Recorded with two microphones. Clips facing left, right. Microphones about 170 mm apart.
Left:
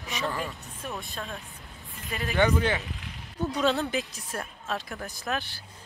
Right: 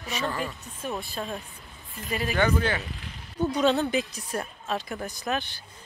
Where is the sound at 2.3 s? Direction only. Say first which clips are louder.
Left 2 dB; 20° left (ahead or behind).